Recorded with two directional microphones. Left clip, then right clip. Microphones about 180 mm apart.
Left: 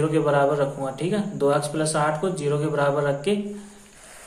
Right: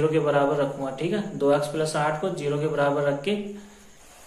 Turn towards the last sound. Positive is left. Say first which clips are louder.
# left 1 dB
turn(degrees=35)  # may be behind; listen again after turning